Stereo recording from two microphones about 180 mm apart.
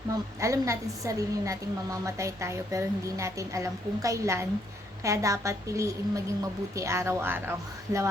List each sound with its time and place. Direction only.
0.3 s a woman's voice: 15° right (ahead or behind)